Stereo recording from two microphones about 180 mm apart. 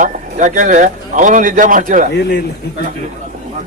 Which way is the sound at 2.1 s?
75° left (ahead or behind).